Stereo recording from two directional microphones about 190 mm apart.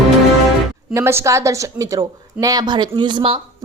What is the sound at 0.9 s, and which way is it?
A woman's voice, 15° right (ahead or behind).